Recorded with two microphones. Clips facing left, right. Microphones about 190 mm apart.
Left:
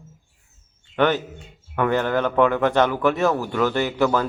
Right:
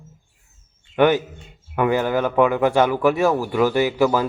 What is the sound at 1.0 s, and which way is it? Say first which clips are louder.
Speech: right 4 dB; 10° right (ahead or behind).